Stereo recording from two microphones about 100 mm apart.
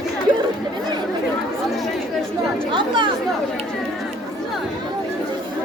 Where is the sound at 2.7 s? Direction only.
55° right (ahead or behind).